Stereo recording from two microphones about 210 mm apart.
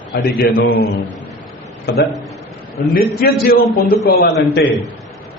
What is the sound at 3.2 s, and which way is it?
A man's voice, 45° left (ahead or behind).